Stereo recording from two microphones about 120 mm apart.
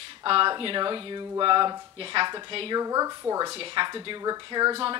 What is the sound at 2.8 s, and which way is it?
Speech, 30° right (ahead or behind).